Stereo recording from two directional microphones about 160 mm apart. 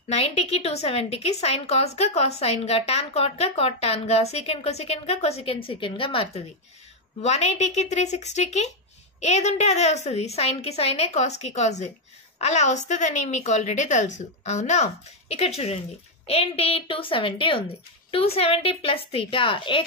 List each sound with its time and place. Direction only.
0.1 s a woman's voice: 40° left (ahead or behind)